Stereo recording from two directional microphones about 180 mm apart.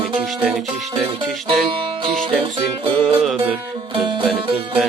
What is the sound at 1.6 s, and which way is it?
Music, 30° right (ahead or behind).